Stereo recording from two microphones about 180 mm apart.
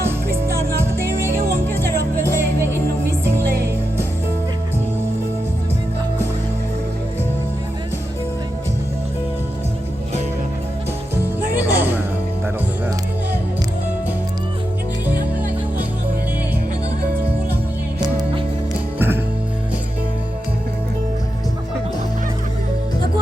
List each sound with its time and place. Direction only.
0.0 s music: 15° right (ahead or behind)
11.5 s music: 10° right (ahead or behind)
15.0 s music: 10° right (ahead or behind)
18.0 s music: 20° right (ahead or behind)
18.9 s music: 10° right (ahead or behind)